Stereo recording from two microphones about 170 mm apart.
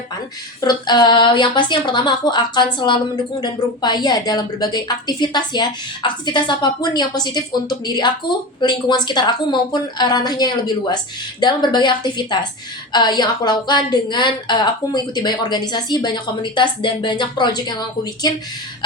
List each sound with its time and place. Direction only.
0.6 s a woman's voice: 25° left (ahead or behind)